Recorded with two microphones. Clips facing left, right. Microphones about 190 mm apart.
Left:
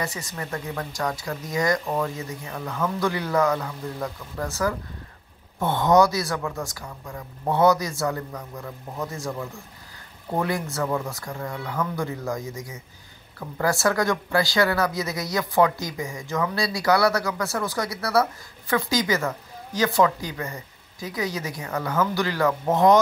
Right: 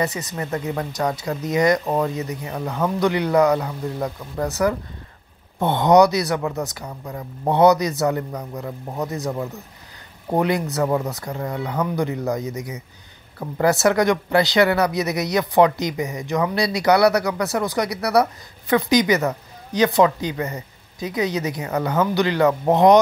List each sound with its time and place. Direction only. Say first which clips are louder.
0.0 s speech: right 6 dB; 20° right (ahead or behind)
6.8 s speech: right 5 dB; 35° right (ahead or behind)
7.5 s speech: right 4 dB; 20° right (ahead or behind)
8.5 s speech: right 5 dB; 30° right (ahead or behind)
10.4 s speech: right 5 dB; 20° right (ahead or behind)